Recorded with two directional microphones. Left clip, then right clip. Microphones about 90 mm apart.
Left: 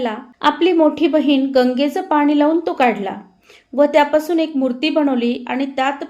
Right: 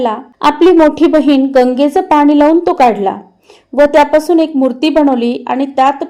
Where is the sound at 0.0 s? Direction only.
40° right (ahead or behind).